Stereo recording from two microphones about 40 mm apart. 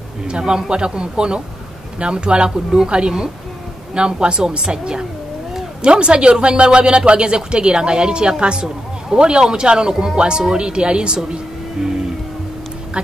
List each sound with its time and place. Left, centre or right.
0.3 s speech: right